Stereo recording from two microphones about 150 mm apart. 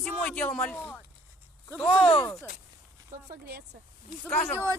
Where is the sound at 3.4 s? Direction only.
90° right.